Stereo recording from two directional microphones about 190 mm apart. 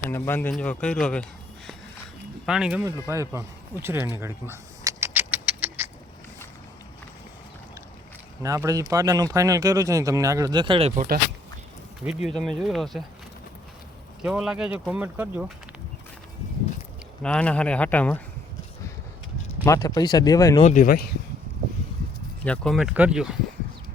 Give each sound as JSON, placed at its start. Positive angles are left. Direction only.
{"t": 0.1, "sound": "speech", "side_deg": 10}
{"t": 2.5, "sound": "speech", "side_deg": -5}
{"t": 2.8, "sound": "speech", "side_deg": -15}
{"t": 4.2, "sound": "keys jangling", "side_deg": -15}
{"t": 8.4, "sound": "speech", "side_deg": -15}
{"t": 12.0, "sound": "speech", "side_deg": 0}
{"t": 14.3, "sound": "speech", "side_deg": -5}
{"t": 17.2, "sound": "speech", "side_deg": 5}
{"t": 19.6, "sound": "speech", "side_deg": 20}
{"t": 20.6, "sound": "speech", "side_deg": 40}
{"t": 22.4, "sound": "speech", "side_deg": 5}